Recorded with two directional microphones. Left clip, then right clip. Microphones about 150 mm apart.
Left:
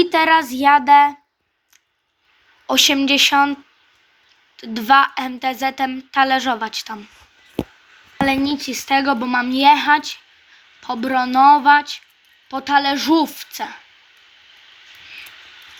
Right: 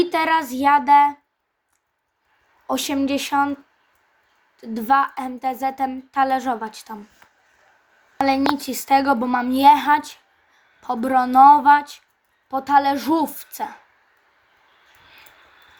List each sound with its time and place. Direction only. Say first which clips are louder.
0.0 s speech: left 5 dB; 10° right (ahead or behind)
2.6 s speech: left 8 dB; 10° right (ahead or behind)
8.2 s a woman's voice: even; centre (ahead or behind)
8.5 s speech: even; 15° right (ahead or behind)